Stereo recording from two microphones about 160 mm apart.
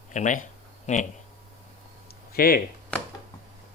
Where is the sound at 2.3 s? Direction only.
65° left (ahead or behind).